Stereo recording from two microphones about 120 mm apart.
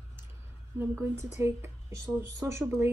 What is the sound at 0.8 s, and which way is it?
Speech, 20° right (ahead or behind).